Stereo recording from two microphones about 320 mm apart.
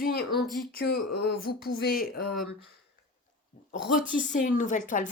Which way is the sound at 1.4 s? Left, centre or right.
Left.